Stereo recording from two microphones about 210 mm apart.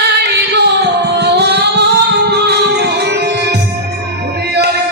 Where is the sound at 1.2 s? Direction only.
50° right (ahead or behind).